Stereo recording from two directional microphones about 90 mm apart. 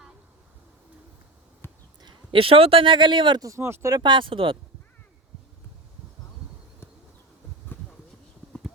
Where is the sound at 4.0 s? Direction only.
60° right (ahead or behind).